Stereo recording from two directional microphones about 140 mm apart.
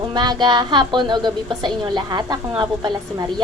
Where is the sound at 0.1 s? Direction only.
30° right (ahead or behind).